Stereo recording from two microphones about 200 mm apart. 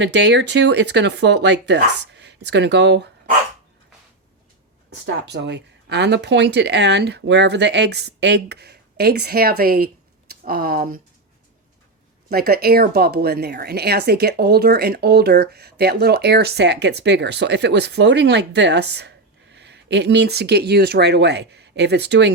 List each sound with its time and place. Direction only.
0.0 s speech: 60° right (ahead or behind)
5.0 s speech: 60° right (ahead or behind)
12.3 s speech: 50° right (ahead or behind)